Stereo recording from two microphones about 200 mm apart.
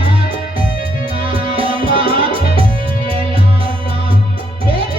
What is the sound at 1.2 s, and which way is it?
Music, 25° right (ahead or behind).